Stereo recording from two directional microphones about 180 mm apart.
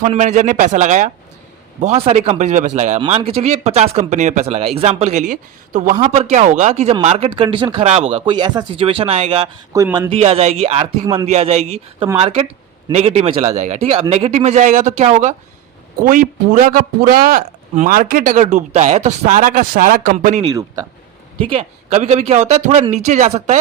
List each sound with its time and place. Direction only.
0.0 s speech: 40° right (ahead or behind)
3.0 s speech: 30° right (ahead or behind)
9.7 s speech: 15° right (ahead or behind)
10.1 s speech: 35° right (ahead or behind)
11.0 s a man's voice: 20° right (ahead or behind)
11.3 s speech: 35° right (ahead or behind)
20.5 s a man's voice: 20° right (ahead or behind)
21.3 s speech: 30° right (ahead or behind)